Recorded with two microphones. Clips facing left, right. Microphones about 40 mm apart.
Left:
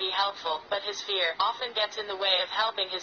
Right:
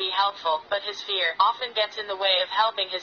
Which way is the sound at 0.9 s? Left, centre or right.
Right.